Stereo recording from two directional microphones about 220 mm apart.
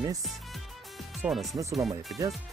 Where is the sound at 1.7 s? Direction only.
Centre (ahead or behind).